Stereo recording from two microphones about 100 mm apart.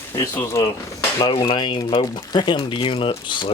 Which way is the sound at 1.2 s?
55° left (ahead or behind).